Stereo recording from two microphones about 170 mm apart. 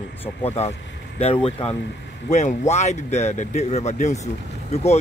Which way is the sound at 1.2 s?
35° left (ahead or behind).